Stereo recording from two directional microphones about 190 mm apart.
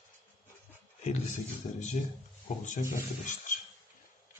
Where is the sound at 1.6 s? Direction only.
40° left (ahead or behind).